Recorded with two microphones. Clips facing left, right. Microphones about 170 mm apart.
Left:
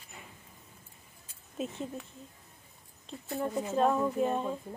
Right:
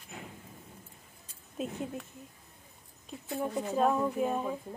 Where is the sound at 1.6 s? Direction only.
Centre (ahead or behind).